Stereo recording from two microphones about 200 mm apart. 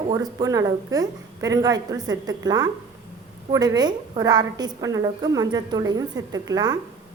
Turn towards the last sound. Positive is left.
turn(degrees=-20)  # may be behind; listen again after turning